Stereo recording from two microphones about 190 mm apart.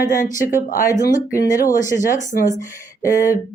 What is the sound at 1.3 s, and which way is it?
Speech, 15° left (ahead or behind).